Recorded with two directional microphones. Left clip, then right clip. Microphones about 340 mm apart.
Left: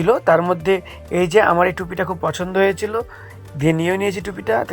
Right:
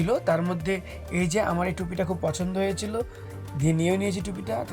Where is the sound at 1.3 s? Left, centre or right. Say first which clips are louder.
Left 13 dB; left.